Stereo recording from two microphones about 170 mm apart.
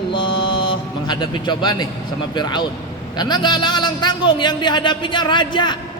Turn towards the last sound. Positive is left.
turn(degrees=25)  # may be behind; listen again after turning